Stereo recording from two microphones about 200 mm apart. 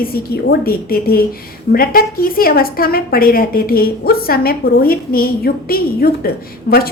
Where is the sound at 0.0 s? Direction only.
50° left (ahead or behind).